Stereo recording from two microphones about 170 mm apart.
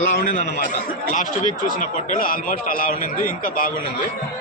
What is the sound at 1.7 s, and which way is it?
A man's voice, 50° left (ahead or behind).